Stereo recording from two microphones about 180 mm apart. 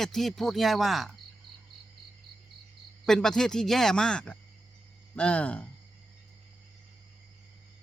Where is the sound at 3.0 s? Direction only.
5° left (ahead or behind).